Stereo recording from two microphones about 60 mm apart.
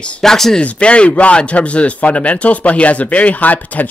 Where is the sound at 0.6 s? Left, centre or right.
Centre.